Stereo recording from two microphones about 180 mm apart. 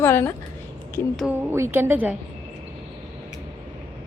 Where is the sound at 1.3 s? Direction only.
10° right (ahead or behind).